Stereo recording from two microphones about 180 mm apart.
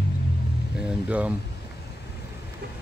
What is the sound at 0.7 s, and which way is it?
Speech, 5° right (ahead or behind).